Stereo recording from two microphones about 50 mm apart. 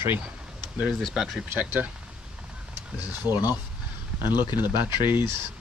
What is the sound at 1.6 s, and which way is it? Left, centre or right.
Speech, right.